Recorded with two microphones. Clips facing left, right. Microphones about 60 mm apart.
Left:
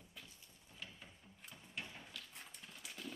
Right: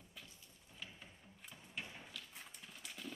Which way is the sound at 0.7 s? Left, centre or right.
Centre.